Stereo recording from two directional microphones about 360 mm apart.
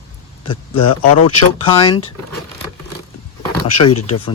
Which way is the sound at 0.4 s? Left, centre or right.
Centre.